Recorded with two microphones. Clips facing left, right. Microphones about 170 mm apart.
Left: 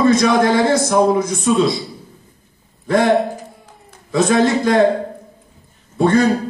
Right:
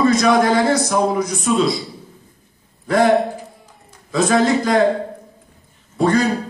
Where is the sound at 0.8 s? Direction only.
20° left (ahead or behind).